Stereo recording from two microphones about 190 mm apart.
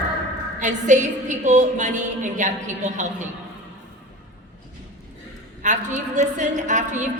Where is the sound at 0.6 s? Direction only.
40° right (ahead or behind).